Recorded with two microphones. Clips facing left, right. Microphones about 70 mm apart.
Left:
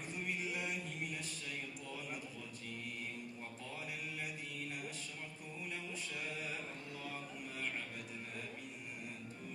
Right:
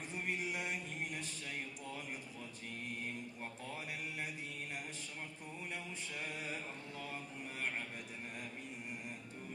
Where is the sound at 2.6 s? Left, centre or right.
Right.